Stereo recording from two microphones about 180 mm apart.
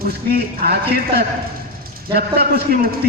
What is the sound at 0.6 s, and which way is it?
A man's voice, 60° right (ahead or behind).